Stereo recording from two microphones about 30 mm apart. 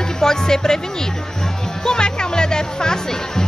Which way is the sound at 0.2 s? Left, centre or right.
Left.